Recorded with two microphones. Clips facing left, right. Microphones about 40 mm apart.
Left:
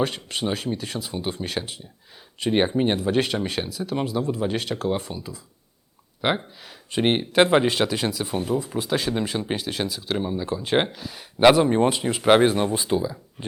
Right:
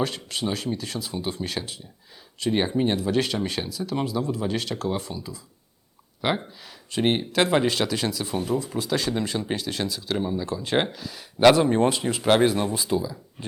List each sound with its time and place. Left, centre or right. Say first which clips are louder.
0.0 s speech: left 2 dB; centre
2.4 s speech: left 2 dB; left